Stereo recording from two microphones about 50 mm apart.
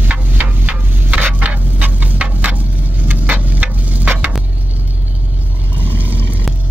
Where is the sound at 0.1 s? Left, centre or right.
Right.